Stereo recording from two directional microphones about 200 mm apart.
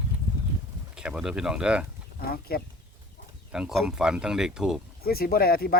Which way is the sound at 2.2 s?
50° left (ahead or behind).